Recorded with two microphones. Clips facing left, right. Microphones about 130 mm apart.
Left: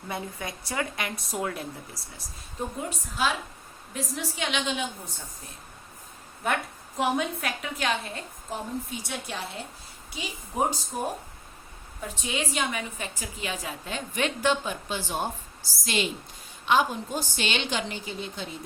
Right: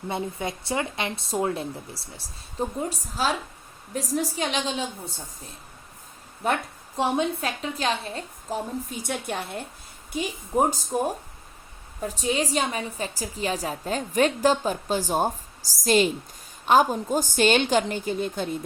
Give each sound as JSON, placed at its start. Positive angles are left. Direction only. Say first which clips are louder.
{"t": 0.1, "sound": "a woman's voice", "louder": "right 5 dB", "side_deg": -25}
{"t": 6.4, "sound": "a woman's voice", "louder": "right 3 dB", "side_deg": -30}
{"t": 8.9, "sound": "a woman's voice", "louder": "right 5 dB", "side_deg": -50}